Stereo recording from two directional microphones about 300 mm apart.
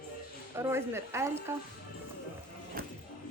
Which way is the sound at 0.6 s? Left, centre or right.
Centre.